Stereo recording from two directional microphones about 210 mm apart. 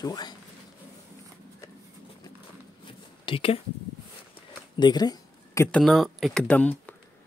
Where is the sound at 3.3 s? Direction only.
25° left (ahead or behind).